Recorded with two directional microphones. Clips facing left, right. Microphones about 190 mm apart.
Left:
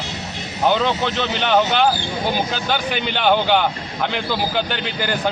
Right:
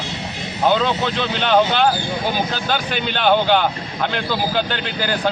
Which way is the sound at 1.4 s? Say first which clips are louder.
Right 1 dB; 15° left (ahead or behind).